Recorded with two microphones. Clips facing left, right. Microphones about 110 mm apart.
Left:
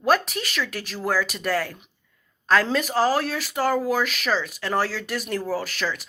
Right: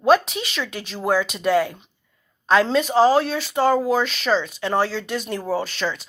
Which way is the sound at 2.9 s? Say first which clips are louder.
Right 6 dB; 20° right (ahead or behind).